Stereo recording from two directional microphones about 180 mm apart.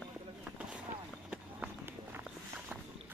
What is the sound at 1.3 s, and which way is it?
Walk, 10° right (ahead or behind).